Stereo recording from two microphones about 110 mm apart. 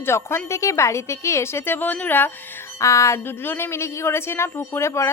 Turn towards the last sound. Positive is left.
turn(degrees=25)  # may be behind; listen again after turning